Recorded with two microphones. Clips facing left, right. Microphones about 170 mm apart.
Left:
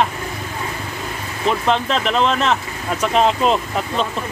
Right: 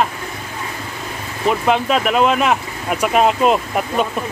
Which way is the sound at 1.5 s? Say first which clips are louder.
Right 2 dB; 5° right (ahead or behind).